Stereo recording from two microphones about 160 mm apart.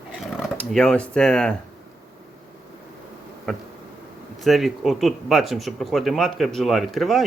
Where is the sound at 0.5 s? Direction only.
5° left (ahead or behind).